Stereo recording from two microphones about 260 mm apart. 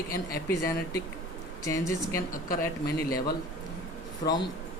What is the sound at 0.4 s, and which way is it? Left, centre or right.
Speech, centre.